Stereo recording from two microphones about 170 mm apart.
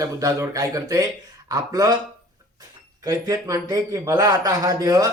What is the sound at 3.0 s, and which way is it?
Speech, 20° right (ahead or behind).